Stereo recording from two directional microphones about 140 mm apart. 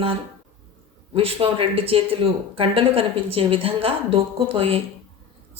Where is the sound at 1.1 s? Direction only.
40° right (ahead or behind).